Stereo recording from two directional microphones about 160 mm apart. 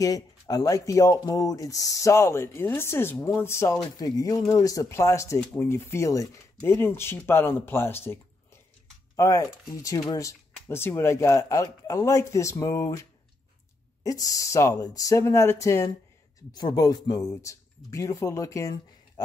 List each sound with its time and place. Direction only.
0.0 s speech: 25° left (ahead or behind)
14.0 s speech: 20° left (ahead or behind)